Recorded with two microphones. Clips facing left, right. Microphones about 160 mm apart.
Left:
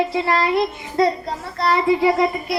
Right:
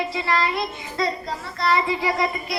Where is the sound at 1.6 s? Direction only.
55° left (ahead or behind).